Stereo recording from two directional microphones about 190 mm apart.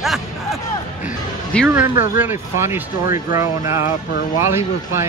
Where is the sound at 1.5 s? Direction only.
5° left (ahead or behind).